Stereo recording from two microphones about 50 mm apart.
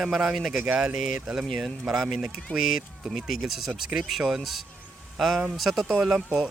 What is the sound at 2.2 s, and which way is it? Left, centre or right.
Speech, centre.